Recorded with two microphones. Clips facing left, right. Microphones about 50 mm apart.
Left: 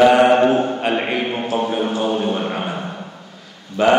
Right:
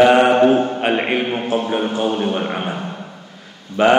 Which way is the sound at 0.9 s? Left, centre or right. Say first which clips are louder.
Right 2 dB; right.